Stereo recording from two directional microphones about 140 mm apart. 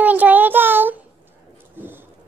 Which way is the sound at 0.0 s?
10° right (ahead or behind).